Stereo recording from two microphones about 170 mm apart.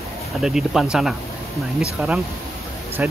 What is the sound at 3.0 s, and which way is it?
Speech, 10° right (ahead or behind).